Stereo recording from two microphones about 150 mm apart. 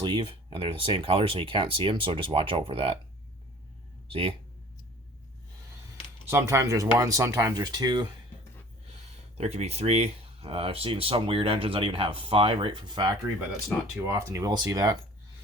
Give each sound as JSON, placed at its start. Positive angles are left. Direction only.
{"t": 0.0, "sound": "speech", "side_deg": -30}
{"t": 4.1, "sound": "speech", "side_deg": -40}
{"t": 6.3, "sound": "speech", "side_deg": -15}
{"t": 9.4, "sound": "speech", "side_deg": -45}
{"t": 14.1, "sound": "speech", "side_deg": -20}